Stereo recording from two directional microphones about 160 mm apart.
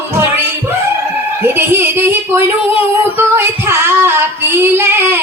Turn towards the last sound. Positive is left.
turn(degrees=-15)  # may be behind; listen again after turning